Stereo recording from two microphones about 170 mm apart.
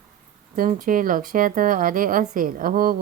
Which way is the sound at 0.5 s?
55° right (ahead or behind).